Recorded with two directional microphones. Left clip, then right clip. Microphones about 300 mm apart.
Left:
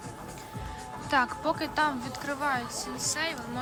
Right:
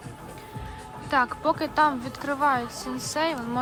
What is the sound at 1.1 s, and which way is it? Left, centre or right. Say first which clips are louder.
Speech: right 3 dB; centre.